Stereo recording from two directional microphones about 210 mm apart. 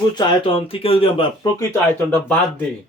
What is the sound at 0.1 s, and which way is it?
Speech, 20° left (ahead or behind).